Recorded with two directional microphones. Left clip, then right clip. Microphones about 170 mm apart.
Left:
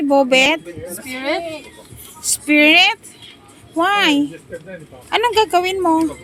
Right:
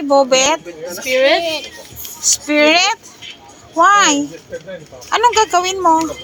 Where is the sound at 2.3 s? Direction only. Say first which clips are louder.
Even; 30° left (ahead or behind).